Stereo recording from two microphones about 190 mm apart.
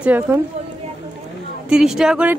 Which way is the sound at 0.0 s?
10° right (ahead or behind).